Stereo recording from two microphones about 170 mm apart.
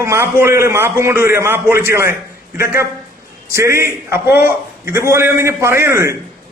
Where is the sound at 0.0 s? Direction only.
15° right (ahead or behind).